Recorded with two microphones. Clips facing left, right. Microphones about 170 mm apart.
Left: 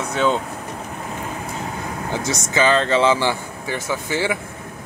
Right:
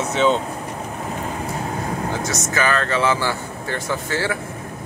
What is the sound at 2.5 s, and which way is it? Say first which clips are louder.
Speech: left 4 dB; 25° left (ahead or behind).